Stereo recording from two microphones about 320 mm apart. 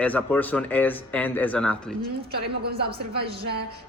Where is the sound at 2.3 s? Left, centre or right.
Right.